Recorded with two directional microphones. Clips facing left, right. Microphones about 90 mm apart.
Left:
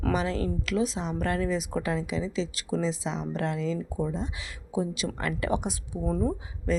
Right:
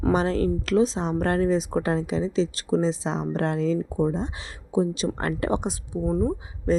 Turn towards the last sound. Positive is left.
turn(degrees=-30)  # may be behind; listen again after turning